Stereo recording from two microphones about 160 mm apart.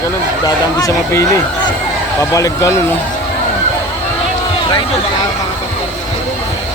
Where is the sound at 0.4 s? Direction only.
20° left (ahead or behind).